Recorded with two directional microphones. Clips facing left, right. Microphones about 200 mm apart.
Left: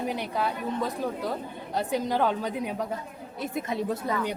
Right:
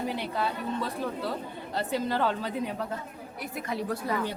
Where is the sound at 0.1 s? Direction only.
15° left (ahead or behind).